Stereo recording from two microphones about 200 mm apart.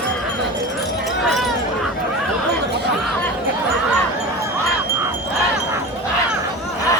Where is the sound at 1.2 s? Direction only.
Centre (ahead or behind).